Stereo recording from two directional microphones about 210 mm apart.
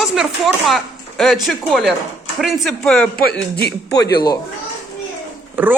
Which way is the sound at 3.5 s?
50° left (ahead or behind).